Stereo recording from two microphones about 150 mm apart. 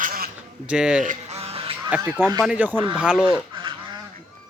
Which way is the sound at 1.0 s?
45° right (ahead or behind).